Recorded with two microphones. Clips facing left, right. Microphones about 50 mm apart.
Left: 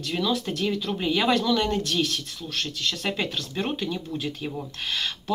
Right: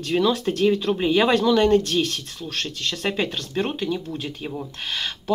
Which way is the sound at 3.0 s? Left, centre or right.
Centre.